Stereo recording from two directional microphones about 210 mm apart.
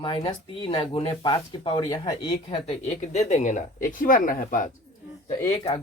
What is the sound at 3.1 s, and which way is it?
Speech, 35° left (ahead or behind).